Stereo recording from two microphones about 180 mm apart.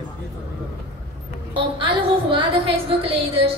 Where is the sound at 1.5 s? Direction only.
30° right (ahead or behind).